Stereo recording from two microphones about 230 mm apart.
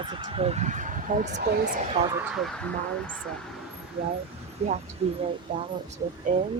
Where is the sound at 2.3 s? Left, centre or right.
Centre.